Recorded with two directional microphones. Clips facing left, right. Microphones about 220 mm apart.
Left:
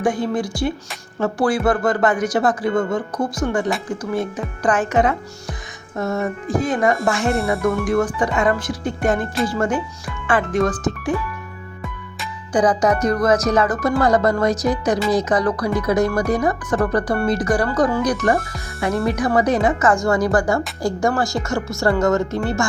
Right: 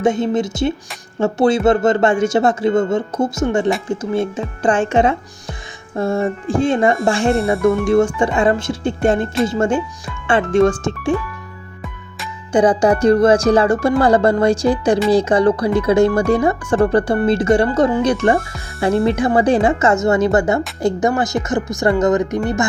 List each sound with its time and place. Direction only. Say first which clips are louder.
0.0 s speech: right 4 dB; 25° right (ahead or behind)
12.5 s speech: right 4 dB; 30° right (ahead or behind)